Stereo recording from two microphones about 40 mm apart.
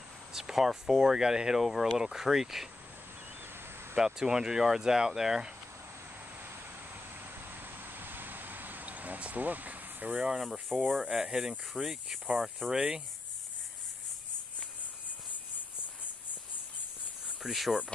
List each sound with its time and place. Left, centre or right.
0.3 s speech: centre
3.9 s speech: centre
7.2 s vehicle: right
10.1 s speech: centre
10.7 s speech: centre
11.1 s speech: right
11.7 s speech: centre
12.7 s speech: right
17.4 s speech: centre